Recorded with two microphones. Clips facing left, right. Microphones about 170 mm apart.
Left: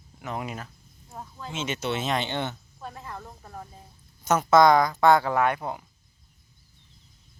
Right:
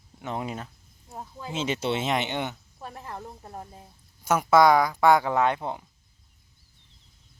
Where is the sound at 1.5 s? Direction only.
30° right (ahead or behind); by 2.5 s 15° right (ahead or behind).